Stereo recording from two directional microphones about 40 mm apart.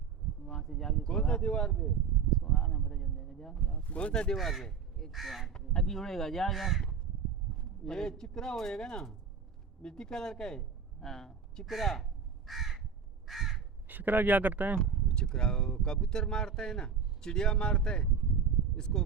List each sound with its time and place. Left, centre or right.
0.6 s speech: centre
2.3 s a sound: centre
3.8 s speech: left
4.1 s speech: centre
4.4 s speech: centre
5.1 s speech: centre
5.5 s speech: centre
6.5 s speech: centre
7.5 s speech: centre
11.6 s speech: centre
12.5 s crow: centre
13.8 s speech: right
14.8 s speech: centre